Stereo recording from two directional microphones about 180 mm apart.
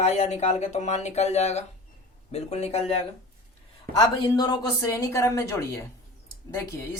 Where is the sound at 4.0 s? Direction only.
25° left (ahead or behind).